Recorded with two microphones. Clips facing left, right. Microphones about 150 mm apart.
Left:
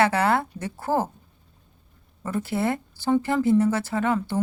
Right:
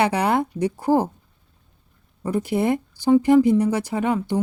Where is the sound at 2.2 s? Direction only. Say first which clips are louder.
Right 4 dB; 15° right (ahead or behind).